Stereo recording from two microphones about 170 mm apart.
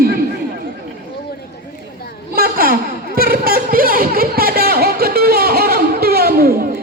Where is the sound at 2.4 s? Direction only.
60° right (ahead or behind).